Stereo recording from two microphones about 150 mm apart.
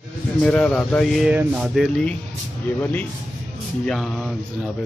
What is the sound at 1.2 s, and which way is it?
Speech, 5° right (ahead or behind).